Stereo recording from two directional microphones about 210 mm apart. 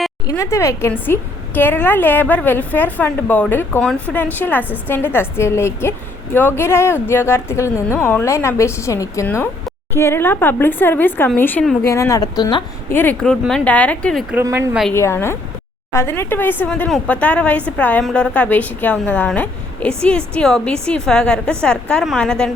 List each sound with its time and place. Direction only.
0.3 s a woman's voice: 15° left (ahead or behind)
12.9 s a woman's voice: 10° left (ahead or behind)
14.3 s speech: 15° right (ahead or behind)
14.9 s a woman's voice: 10° left (ahead or behind)